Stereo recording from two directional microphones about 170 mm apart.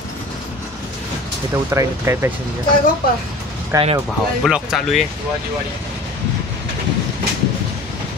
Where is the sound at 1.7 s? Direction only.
15° right (ahead or behind).